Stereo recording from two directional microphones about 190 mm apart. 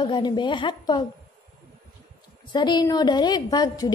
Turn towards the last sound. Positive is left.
turn(degrees=20)  # may be behind; listen again after turning